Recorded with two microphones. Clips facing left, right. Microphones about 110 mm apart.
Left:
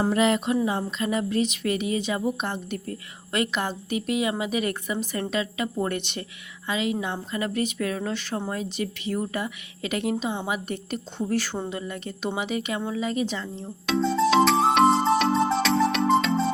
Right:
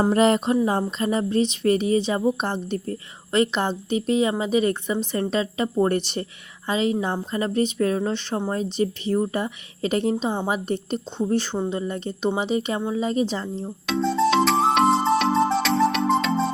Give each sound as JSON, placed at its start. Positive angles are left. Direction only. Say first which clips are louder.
{"t": 0.1, "sound": "speech", "louder": "right 3 dB", "side_deg": -40}
{"t": 13.8, "sound": "music", "louder": "right 1 dB", "side_deg": 0}